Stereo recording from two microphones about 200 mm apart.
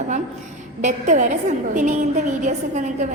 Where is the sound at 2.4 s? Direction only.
40° right (ahead or behind).